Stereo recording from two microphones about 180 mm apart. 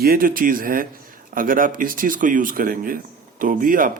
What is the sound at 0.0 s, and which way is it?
Speech, 55° right (ahead or behind).